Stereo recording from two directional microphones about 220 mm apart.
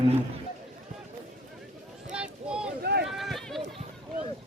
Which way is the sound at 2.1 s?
5° right (ahead or behind).